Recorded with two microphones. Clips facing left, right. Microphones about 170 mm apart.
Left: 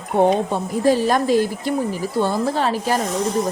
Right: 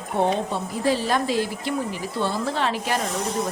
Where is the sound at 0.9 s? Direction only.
45° left (ahead or behind).